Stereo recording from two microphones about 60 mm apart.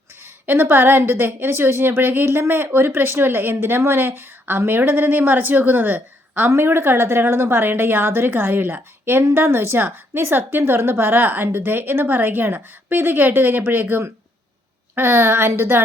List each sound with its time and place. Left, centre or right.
0.4 s a woman's voice: right